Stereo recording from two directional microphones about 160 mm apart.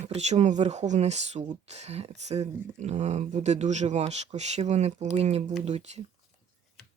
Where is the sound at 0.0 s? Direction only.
45° right (ahead or behind).